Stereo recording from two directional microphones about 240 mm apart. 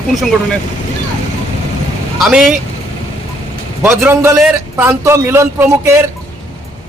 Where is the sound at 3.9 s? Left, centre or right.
Centre.